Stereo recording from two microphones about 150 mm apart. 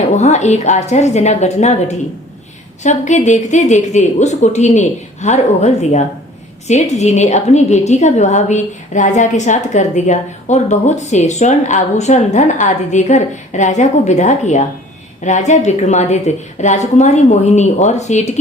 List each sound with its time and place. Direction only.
0.2 s a woman's voice: 50° left (ahead or behind)